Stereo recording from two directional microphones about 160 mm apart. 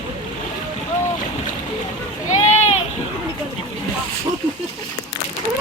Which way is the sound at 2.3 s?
45° left (ahead or behind).